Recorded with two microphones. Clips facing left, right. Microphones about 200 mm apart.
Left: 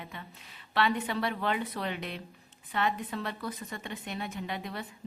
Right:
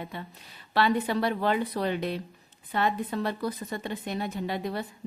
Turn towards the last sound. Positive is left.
turn(degrees=-35)  # may be behind; listen again after turning